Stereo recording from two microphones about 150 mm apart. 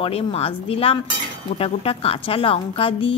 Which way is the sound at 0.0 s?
40° left (ahead or behind).